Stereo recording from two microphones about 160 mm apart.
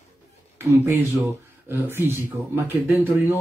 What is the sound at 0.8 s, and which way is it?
Speech, 15° right (ahead or behind).